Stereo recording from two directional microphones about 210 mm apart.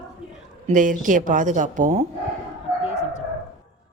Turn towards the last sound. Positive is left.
turn(degrees=30)  # may be behind; listen again after turning